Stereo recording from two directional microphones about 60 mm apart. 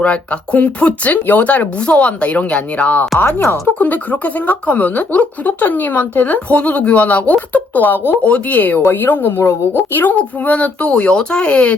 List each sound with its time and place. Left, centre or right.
0.0 s speech: left
10.2 s speech: left